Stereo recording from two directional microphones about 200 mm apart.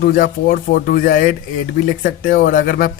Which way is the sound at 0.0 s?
45° left (ahead or behind).